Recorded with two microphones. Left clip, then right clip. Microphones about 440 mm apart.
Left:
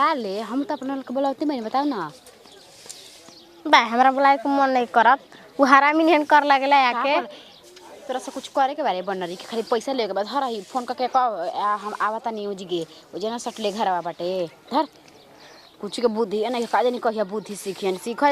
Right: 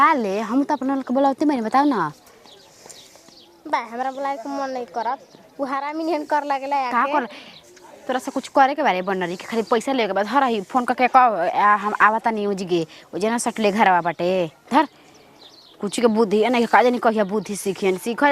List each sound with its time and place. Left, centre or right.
0.0 s speech: right
3.7 s speech: left
6.9 s speech: right
14.4 s speech: right